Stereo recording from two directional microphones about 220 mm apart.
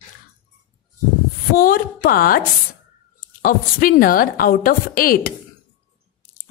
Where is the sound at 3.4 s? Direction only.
40° left (ahead or behind).